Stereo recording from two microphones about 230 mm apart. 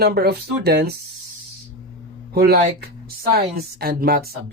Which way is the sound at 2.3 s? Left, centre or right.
Right.